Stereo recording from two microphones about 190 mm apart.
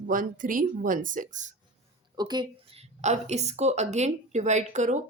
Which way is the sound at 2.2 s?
20° right (ahead or behind).